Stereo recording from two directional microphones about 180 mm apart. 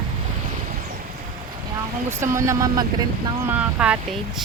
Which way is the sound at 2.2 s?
15° right (ahead or behind).